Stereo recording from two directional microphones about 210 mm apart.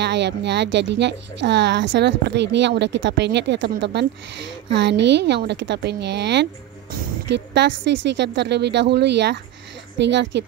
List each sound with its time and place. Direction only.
0.0 s speech: 55° right (ahead or behind)